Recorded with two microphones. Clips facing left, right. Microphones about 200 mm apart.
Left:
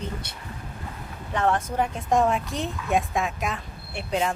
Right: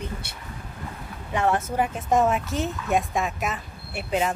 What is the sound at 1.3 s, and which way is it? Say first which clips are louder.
Speech: right 1 dB; 5° right (ahead or behind).